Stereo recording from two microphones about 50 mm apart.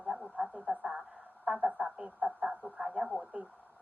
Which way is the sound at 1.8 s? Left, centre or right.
Centre.